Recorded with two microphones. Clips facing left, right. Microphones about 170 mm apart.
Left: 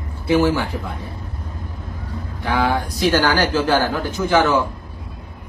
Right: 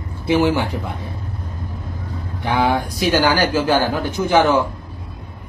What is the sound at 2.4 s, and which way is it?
A man's voice, 20° right (ahead or behind).